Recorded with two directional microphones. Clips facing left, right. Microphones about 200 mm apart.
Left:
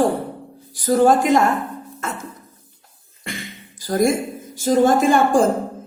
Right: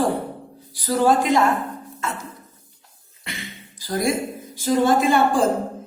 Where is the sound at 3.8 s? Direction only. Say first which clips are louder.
Left 4 dB; 50° left (ahead or behind).